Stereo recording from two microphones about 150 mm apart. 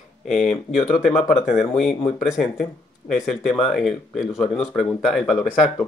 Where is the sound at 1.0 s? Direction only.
45° left (ahead or behind).